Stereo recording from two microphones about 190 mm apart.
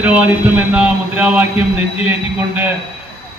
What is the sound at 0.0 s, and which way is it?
A man's voice, 10° right (ahead or behind).